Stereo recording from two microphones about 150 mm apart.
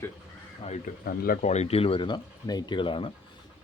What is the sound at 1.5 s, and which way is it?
Speech, 45° left (ahead or behind).